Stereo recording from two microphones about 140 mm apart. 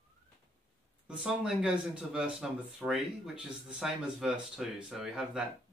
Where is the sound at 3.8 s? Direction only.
5° right (ahead or behind).